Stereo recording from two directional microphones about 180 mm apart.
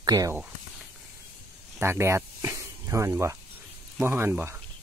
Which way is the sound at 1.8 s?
15° right (ahead or behind).